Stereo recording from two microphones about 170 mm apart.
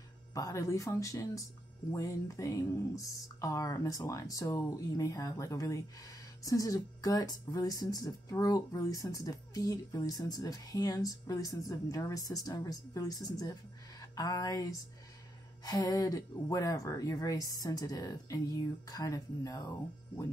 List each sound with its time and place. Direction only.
0.3 s speech: 20° left (ahead or behind)